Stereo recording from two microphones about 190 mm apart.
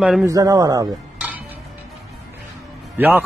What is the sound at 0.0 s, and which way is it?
Speech, 5° right (ahead or behind).